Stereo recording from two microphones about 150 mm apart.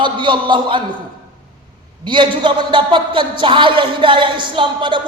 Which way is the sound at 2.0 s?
30° right (ahead or behind).